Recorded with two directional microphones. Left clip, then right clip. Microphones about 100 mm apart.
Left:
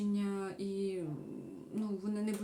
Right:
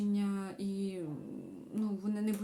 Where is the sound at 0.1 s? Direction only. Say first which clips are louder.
Even; 30° right (ahead or behind).